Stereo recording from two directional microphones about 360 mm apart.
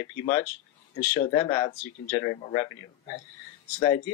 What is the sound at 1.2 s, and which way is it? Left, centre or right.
Speech, centre.